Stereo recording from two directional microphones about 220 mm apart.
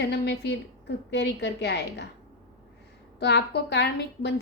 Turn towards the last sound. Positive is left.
turn(degrees=50)  # may be behind; listen again after turning